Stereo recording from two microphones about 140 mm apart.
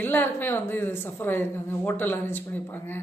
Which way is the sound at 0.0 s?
15° left (ahead or behind).